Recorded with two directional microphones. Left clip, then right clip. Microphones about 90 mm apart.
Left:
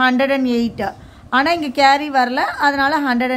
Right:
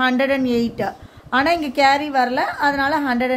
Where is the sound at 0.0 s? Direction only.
40° left (ahead or behind).